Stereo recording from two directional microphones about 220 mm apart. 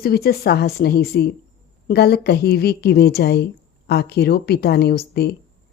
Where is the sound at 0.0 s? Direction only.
45° left (ahead or behind).